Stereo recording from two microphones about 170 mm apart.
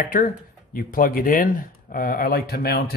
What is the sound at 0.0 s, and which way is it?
Speech, 55° left (ahead or behind).